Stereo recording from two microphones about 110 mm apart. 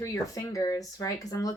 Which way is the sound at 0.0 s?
25° left (ahead or behind).